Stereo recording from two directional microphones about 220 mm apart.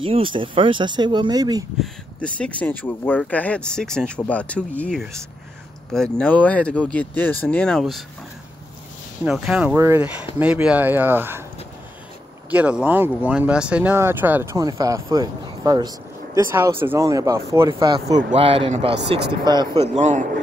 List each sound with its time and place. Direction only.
0.0 s speech: 25° right (ahead or behind)
1.8 s speech: 5° left (ahead or behind)
9.2 s speech: 5° right (ahead or behind)
12.4 s speech: 5° right (ahead or behind)
20.0 s speech: 35° right (ahead or behind)